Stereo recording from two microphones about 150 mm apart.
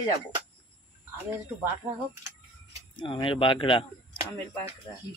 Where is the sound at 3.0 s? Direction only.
35° left (ahead or behind).